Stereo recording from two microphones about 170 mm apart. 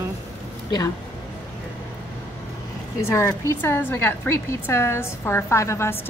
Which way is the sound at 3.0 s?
15° left (ahead or behind).